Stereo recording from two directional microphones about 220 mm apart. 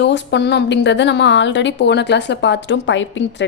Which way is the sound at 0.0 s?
50° left (ahead or behind).